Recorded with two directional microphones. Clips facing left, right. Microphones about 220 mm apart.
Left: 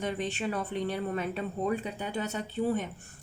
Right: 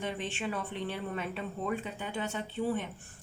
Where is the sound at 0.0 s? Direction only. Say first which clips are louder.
Left 3 dB; 40° left (ahead or behind).